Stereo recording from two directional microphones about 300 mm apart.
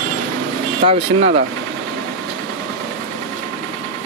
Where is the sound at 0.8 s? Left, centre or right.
Right.